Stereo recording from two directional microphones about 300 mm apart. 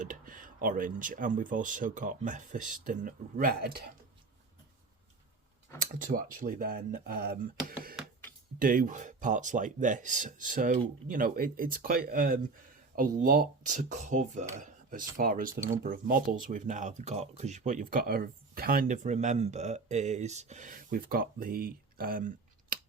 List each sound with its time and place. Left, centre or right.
0.0 s speech: right
5.8 s speech: right
22.7 s scissors: right